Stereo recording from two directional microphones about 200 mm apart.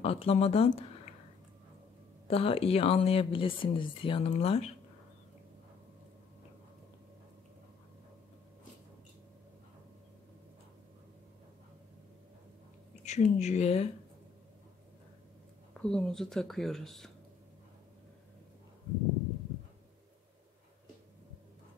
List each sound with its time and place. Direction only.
0.0 s speech: 30° left (ahead or behind)
2.2 s speech: 30° left (ahead or behind)
13.0 s speech: 35° left (ahead or behind)
15.8 s speech: 5° left (ahead or behind)